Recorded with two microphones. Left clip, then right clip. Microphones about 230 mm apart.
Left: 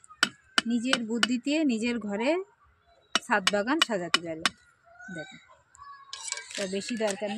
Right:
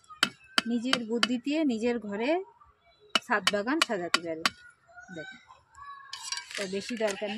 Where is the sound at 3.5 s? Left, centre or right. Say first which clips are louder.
Left 2 dB; left.